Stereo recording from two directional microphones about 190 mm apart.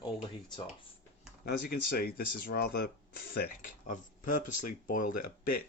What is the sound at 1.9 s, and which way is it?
Speech, 55° left (ahead or behind).